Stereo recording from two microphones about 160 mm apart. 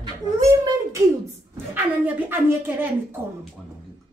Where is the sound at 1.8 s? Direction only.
10° right (ahead or behind).